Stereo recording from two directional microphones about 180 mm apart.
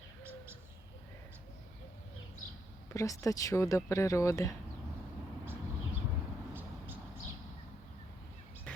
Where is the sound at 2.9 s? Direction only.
20° left (ahead or behind).